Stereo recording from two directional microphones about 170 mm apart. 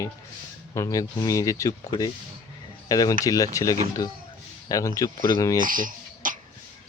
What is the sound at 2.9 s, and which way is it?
Speech, 20° left (ahead or behind).